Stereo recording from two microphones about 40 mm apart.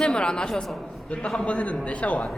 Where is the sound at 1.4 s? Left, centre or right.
Left.